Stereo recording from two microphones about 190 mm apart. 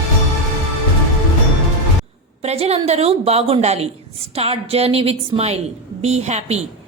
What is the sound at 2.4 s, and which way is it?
A woman's voice, 35° right (ahead or behind).